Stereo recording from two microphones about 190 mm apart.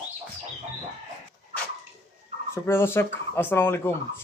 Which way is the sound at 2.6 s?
10° left (ahead or behind).